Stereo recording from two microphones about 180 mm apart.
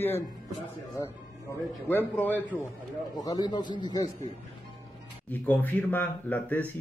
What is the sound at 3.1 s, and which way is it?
Speech, 20° left (ahead or behind).